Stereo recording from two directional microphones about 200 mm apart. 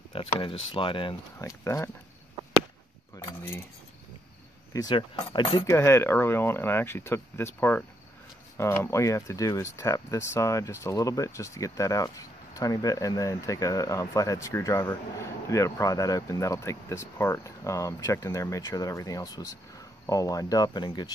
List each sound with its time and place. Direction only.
0.1 s speech: 25° left (ahead or behind)
3.2 s speech: 15° left (ahead or behind)
4.7 s speech: 20° left (ahead or behind)
5.8 s speech: 15° left (ahead or behind)